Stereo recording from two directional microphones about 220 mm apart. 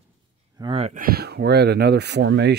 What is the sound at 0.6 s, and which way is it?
Speech, 25° right (ahead or behind).